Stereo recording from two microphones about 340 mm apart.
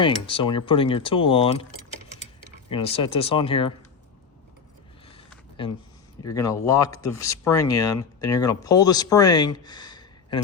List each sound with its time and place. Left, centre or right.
0.0 s speech: centre
2.6 s speech: centre
6.2 s speech: centre